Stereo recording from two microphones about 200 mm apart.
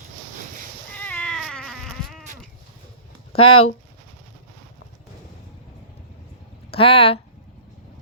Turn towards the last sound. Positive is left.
turn(degrees=30)  # may be behind; listen again after turning